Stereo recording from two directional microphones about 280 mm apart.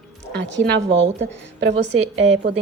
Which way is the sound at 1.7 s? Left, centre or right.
Right.